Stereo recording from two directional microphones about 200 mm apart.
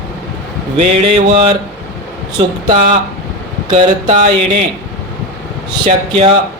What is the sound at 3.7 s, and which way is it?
Speech, 35° right (ahead or behind).